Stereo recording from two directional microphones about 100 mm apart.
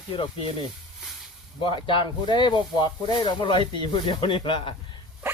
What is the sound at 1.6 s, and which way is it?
Speech, 55° left (ahead or behind).